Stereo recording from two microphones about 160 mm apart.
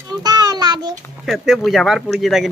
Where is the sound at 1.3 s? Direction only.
Centre (ahead or behind).